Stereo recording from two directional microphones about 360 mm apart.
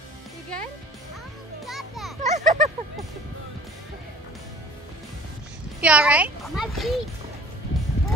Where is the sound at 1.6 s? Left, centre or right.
Centre.